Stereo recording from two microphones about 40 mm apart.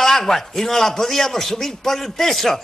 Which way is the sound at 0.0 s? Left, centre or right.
Centre.